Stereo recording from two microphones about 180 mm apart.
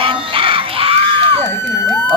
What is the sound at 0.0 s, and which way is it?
Music, 30° right (ahead or behind).